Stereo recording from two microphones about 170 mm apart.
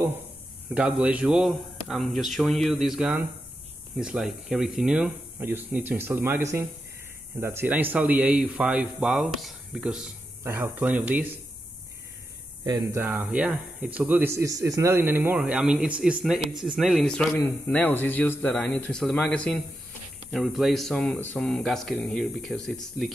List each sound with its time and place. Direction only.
0.7 s speech: 5° right (ahead or behind)
12.6 s speech: 20° right (ahead or behind)
13.0 s speech: 10° right (ahead or behind)